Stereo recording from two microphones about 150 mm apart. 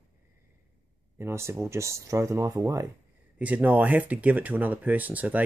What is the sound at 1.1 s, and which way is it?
Speech, 15° right (ahead or behind).